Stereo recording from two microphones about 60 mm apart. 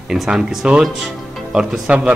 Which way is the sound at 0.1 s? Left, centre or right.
Centre.